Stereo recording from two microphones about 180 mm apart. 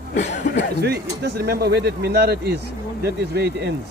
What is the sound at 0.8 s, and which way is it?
Speech, 65° right (ahead or behind).